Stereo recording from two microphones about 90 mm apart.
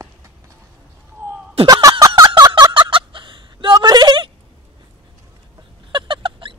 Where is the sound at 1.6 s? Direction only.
45° right (ahead or behind).